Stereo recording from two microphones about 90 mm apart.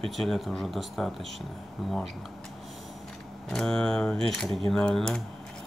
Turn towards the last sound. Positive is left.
turn(degrees=5)  # may be behind; listen again after turning